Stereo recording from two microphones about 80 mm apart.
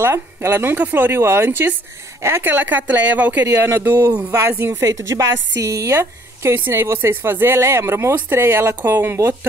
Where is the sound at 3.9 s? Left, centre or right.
Right.